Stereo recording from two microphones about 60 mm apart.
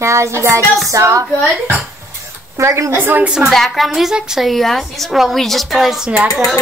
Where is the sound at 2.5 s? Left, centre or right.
Right.